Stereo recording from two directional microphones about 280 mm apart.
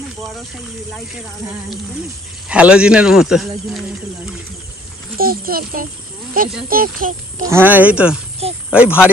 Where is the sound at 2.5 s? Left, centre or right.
Centre.